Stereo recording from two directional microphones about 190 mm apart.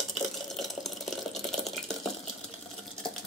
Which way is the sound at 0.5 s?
Centre (ahead or behind).